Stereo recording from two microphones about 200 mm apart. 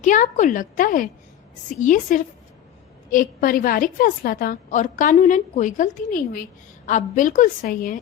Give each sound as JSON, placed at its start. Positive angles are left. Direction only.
{"t": 0.0, "sound": "a woman's voice", "side_deg": 40}